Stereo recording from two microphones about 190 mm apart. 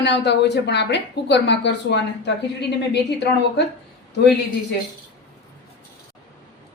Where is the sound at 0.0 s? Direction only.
65° left (ahead or behind).